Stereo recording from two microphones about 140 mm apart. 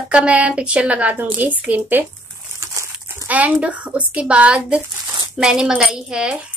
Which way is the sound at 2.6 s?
20° right (ahead or behind).